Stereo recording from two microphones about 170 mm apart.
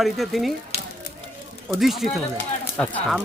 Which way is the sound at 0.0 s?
Centre (ahead or behind).